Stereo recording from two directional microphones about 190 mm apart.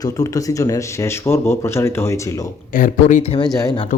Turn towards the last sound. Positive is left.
turn(degrees=25)  # may be behind; listen again after turning